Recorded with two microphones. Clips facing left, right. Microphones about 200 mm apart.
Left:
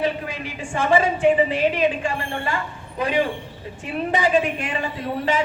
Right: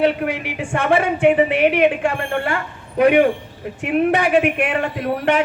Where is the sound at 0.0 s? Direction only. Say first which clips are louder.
Right 6 dB; 65° right (ahead or behind).